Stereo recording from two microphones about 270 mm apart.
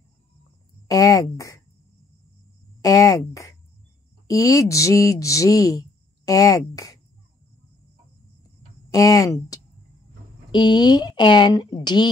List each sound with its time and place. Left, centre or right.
0.8 s a sound: centre
2.8 s cricket: centre
4.3 s speech: centre
8.9 s speech: centre